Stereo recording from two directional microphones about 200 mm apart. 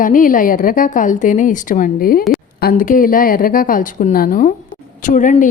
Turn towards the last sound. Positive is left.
turn(degrees=40)  # may be behind; listen again after turning